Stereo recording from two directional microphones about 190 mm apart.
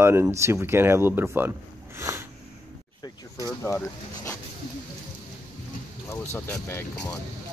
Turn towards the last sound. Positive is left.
turn(degrees=15)  # may be behind; listen again after turning